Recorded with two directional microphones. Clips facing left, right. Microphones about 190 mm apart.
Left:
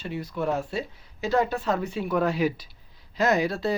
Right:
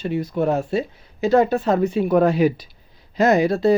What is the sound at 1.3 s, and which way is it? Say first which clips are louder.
Speech: right 7 dB; 55° right (ahead or behind).